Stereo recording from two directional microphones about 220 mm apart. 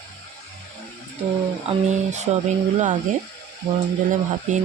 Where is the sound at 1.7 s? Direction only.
30° right (ahead or behind).